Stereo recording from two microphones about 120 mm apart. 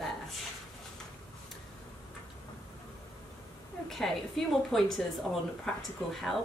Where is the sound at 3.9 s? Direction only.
5° left (ahead or behind).